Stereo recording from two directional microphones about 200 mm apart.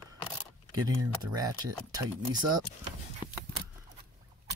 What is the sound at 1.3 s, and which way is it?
Speech, 20° right (ahead or behind).